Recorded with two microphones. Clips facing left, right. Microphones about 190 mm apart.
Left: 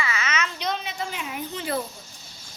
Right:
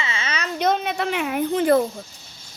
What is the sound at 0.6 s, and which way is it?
Speech, 55° right (ahead or behind).